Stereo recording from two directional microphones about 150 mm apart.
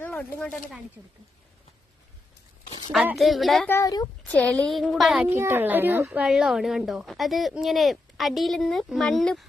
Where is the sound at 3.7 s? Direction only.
20° left (ahead or behind).